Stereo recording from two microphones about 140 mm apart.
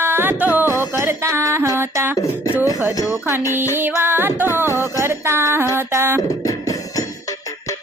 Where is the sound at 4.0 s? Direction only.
15° right (ahead or behind).